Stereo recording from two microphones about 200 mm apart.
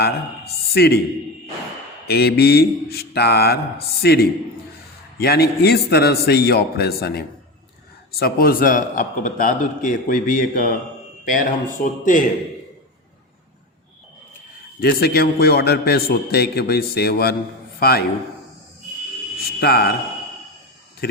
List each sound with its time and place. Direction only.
0.0 s speech: 50° left (ahead or behind)
2.0 s a man's voice: 55° left (ahead or behind)
11.8 s speech: 40° left (ahead or behind)
14.8 s a man's voice: 50° left (ahead or behind)
19.4 s a man's voice: 50° left (ahead or behind)
21.0 s a man's voice: 50° left (ahead or behind)